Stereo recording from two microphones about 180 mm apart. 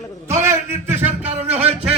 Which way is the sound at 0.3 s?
15° right (ahead or behind).